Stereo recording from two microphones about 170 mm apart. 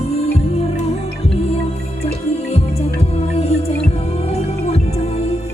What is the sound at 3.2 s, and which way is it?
Music, 35° left (ahead or behind).